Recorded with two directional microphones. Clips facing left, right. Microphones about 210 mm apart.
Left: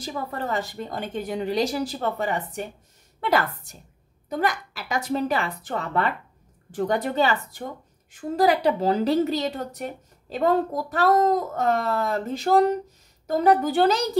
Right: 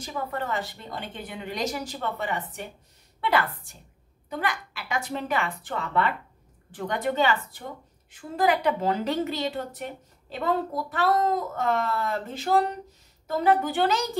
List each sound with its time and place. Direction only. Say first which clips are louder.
0.0 s a woman's voice: left 1 dB; 35° left (ahead or behind)